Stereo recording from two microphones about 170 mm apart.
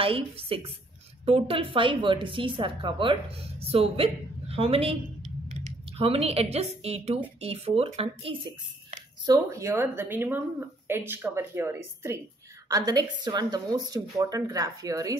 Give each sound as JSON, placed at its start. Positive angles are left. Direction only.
{"t": 0.0, "sound": "a woman's voice", "side_deg": -35}